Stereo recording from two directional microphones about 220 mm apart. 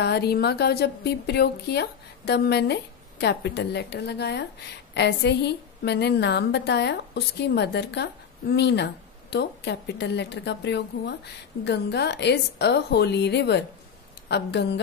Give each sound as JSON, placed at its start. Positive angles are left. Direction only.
{"t": 0.0, "sound": "a woman's voice", "side_deg": 45}